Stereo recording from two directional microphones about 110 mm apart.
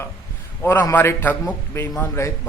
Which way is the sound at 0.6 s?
20° left (ahead or behind).